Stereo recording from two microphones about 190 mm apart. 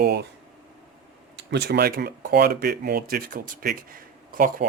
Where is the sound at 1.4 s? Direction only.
60° right (ahead or behind).